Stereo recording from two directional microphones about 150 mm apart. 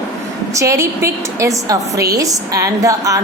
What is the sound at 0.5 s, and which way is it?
A woman's voice, 20° right (ahead or behind).